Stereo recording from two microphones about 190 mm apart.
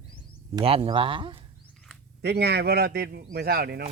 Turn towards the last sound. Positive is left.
turn(degrees=-55)  # may be behind; listen again after turning